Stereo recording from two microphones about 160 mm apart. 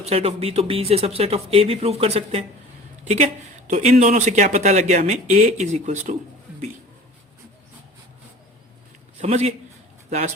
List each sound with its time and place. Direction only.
0.0 s speech: 40° right (ahead or behind)
3.7 s speech: 45° right (ahead or behind)
9.1 s a man's voice: 45° right (ahead or behind)